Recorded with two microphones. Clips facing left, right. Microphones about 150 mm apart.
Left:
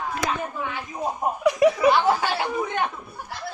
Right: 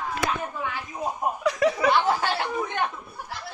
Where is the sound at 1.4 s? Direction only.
15° left (ahead or behind).